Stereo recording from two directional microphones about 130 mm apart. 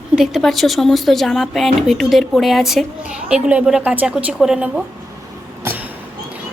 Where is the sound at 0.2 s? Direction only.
Centre (ahead or behind).